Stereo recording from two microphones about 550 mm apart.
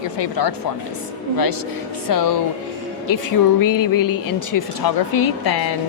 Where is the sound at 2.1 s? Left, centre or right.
Left.